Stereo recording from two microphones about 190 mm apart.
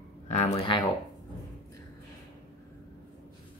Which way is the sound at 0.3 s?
35° left (ahead or behind).